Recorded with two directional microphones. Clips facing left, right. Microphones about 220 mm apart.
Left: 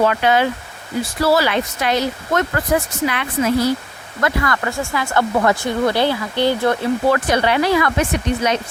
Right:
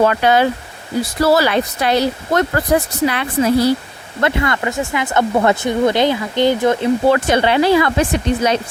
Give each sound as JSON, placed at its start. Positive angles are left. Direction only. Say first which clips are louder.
{"t": 0.0, "sound": "speech", "louder": "right 2 dB", "side_deg": -40}